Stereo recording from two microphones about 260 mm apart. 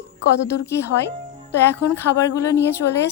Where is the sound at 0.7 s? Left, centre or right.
Centre.